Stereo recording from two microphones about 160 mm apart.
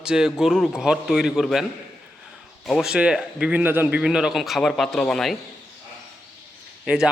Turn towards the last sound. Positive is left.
turn(degrees=-5)  # may be behind; listen again after turning